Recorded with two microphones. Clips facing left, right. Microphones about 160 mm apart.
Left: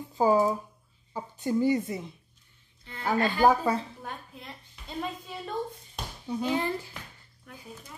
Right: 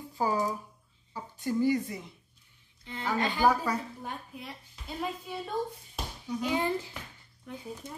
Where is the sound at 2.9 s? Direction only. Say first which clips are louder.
Right 3 dB; 15° right (ahead or behind).